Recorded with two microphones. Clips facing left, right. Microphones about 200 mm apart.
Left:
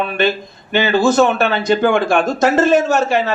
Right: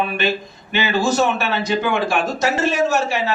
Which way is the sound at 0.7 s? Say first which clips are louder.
Left 5 dB; 50° left (ahead or behind).